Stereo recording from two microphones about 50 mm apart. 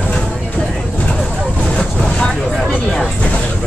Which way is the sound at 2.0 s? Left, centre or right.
Centre.